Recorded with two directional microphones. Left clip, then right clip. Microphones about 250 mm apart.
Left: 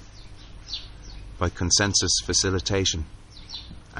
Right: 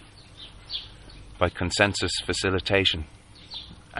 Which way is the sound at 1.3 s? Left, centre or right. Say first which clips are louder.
Right 1 dB; centre.